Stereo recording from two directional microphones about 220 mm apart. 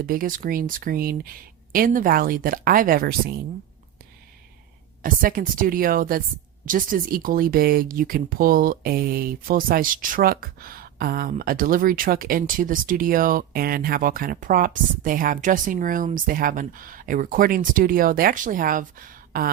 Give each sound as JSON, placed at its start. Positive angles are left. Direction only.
{"t": 0.0, "sound": "speech", "side_deg": -40}
{"t": 5.0, "sound": "speech", "side_deg": -40}